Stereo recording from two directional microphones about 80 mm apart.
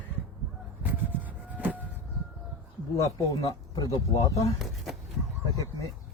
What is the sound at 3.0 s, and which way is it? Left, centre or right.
Speech, left.